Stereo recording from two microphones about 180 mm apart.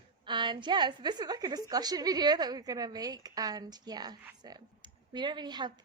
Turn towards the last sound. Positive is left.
turn(degrees=-25)  # may be behind; listen again after turning